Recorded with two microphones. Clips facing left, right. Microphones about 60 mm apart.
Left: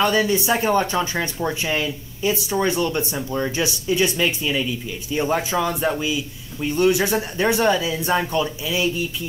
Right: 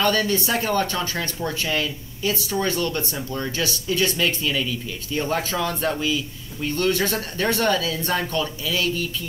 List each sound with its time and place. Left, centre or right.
0.0 s speech: centre